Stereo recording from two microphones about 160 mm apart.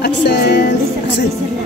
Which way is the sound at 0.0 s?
90° left.